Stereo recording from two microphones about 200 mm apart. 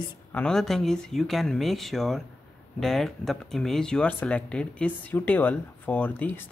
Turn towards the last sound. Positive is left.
turn(degrees=10)  # may be behind; listen again after turning